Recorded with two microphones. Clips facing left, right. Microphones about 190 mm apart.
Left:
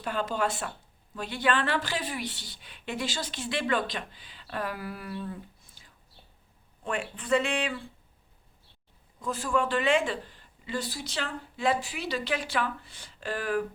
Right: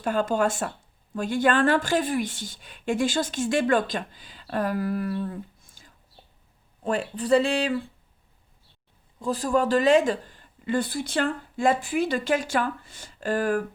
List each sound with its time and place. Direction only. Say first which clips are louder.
0.0 s speech: right 6 dB; 45° right (ahead or behind)
6.8 s speech: right 7 dB; 35° right (ahead or behind)
9.2 s speech: right 5 dB; 35° right (ahead or behind)